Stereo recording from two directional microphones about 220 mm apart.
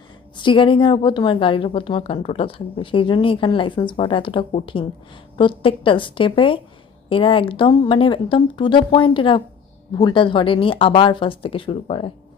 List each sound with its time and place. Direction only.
0.3 s a woman's voice: 20° left (ahead or behind)